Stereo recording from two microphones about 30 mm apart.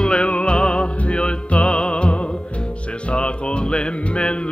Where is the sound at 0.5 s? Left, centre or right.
Left.